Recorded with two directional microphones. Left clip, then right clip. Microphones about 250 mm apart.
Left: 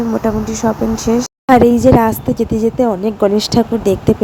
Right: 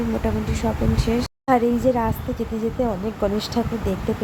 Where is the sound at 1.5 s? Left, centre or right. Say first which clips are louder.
Left 10 dB; left.